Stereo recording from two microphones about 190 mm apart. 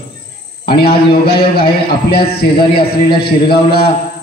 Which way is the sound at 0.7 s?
55° left (ahead or behind).